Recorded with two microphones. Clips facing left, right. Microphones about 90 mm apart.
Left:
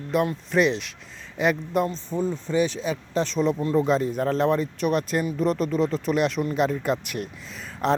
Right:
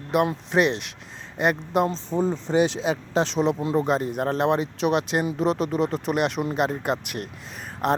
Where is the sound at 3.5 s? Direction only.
15° right (ahead or behind).